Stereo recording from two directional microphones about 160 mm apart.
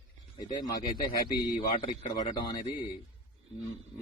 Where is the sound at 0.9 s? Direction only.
30° left (ahead or behind).